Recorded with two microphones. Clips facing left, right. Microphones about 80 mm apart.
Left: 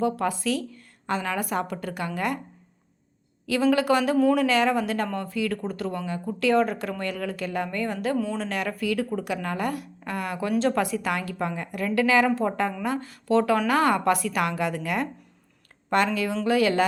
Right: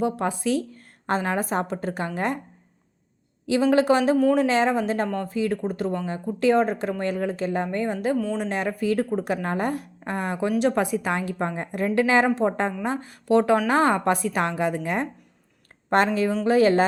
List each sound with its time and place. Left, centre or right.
0.0 s a woman's voice: right
0.7 s a woman's voice: right
3.7 s a woman's voice: right